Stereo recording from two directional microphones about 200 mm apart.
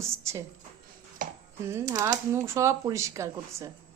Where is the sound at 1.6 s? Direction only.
15° right (ahead or behind).